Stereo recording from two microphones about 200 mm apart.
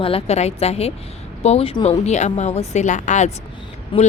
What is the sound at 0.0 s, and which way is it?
Speech, 30° left (ahead or behind).